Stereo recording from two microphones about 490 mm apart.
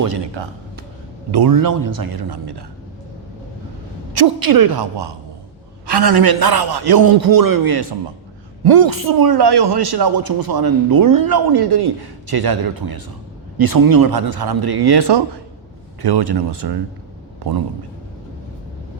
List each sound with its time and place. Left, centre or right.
0.0 s a man's voice: right
1.3 s a man's voice: right
4.1 s a man's voice: right